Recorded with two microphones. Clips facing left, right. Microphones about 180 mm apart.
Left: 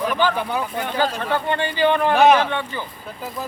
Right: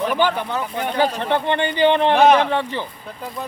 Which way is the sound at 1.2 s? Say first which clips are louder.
Right 2 dB; 25° right (ahead or behind).